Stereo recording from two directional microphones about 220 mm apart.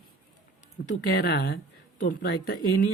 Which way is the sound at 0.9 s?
45° left (ahead or behind).